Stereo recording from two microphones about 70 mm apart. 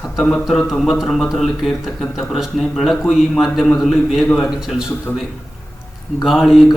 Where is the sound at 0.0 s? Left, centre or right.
Centre.